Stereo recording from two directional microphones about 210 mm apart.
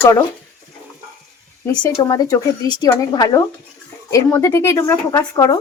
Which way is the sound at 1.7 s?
20° left (ahead or behind).